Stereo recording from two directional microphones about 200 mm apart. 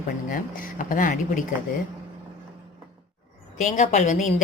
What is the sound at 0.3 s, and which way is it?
Speech, 45° left (ahead or behind).